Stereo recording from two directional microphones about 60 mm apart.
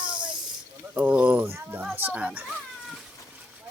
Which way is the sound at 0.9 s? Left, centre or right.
Right.